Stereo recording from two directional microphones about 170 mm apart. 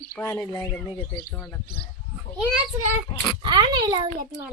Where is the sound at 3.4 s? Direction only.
25° right (ahead or behind).